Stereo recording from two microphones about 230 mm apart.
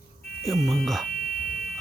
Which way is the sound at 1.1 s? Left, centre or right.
Left.